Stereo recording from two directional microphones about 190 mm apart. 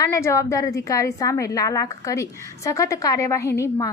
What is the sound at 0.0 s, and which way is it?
A woman's voice, 15° left (ahead or behind).